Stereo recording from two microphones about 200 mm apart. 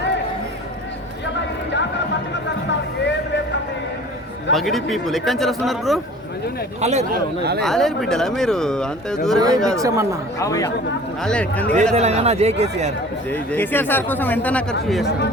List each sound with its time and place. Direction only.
4.5 s speech: centre (ahead or behind)
6.8 s speech: 35° right (ahead or behind)
7.6 s speech: centre (ahead or behind)
9.7 s speech: 15° right (ahead or behind)
10.4 s speech: 15° left (ahead or behind)
11.2 s speech: 5° left (ahead or behind)
11.9 s speech: 30° right (ahead or behind)
13.3 s speech: 10° left (ahead or behind)